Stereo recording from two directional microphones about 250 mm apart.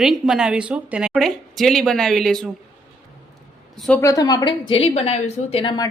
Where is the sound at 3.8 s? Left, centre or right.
Centre.